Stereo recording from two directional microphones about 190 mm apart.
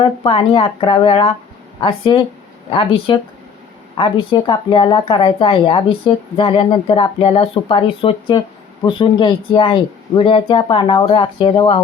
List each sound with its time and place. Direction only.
0.0 s speech: 25° left (ahead or behind)